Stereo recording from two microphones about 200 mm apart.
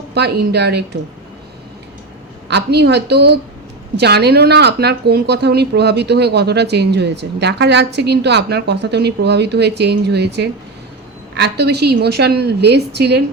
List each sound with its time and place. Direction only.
0.1 s speech: 55° right (ahead or behind)
2.5 s speech: 55° right (ahead or behind)